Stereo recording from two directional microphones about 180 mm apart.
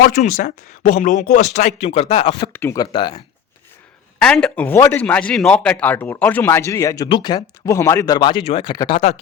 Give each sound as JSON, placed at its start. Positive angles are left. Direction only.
{"t": 0.2, "sound": "speech", "side_deg": 40}
{"t": 2.5, "sound": "speech", "side_deg": 10}
{"t": 4.2, "sound": "speech", "side_deg": 5}